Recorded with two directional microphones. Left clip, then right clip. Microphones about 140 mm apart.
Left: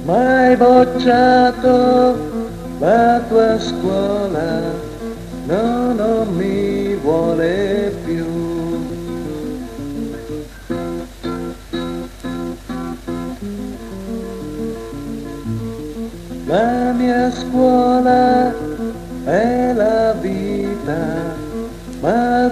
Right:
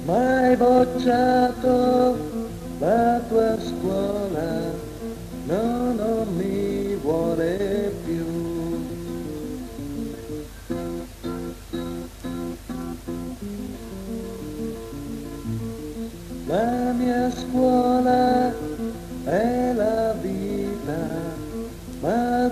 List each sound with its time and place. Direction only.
0.0 s mantra: 25° left (ahead or behind)
5.5 s music: 25° left (ahead or behind)
10.7 s music: 25° left (ahead or behind)
16.4 s music: 25° left (ahead or behind)